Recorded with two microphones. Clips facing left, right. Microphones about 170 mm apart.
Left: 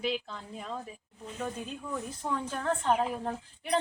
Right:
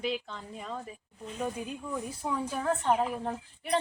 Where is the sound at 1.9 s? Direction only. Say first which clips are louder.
Even; 10° right (ahead or behind).